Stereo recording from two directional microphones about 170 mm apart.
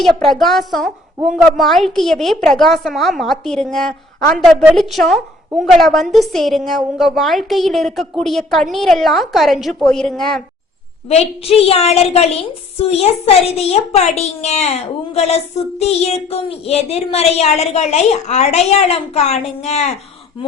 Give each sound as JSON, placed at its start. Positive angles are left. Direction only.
{"t": 0.0, "sound": "a woman's voice", "side_deg": 0}
{"t": 11.1, "sound": "a child's voice", "side_deg": 35}